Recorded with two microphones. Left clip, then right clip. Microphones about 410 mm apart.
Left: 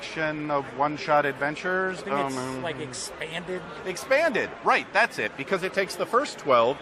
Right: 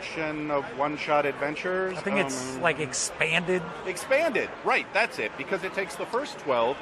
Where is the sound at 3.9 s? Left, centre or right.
Left.